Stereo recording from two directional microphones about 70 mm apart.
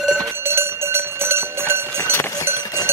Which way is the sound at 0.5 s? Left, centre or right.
Right.